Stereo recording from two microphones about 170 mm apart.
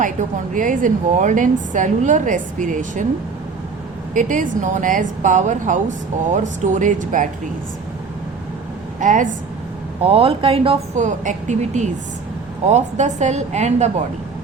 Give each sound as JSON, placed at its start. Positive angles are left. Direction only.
{"t": 0.0, "sound": "a woman's voice", "side_deg": -50}
{"t": 4.1, "sound": "a woman's voice", "side_deg": -50}
{"t": 9.0, "sound": "a woman's voice", "side_deg": -50}
{"t": 10.0, "sound": "a woman's voice", "side_deg": -35}